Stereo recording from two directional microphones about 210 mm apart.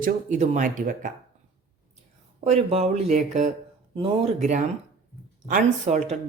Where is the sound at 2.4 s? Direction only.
25° right (ahead or behind).